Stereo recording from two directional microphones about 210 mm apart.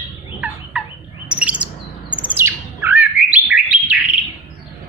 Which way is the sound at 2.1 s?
10° right (ahead or behind).